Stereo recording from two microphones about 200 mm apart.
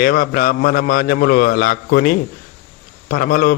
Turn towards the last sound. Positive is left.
turn(degrees=45)  # may be behind; listen again after turning